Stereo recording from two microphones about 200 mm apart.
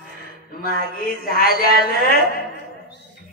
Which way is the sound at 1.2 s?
45° left (ahead or behind).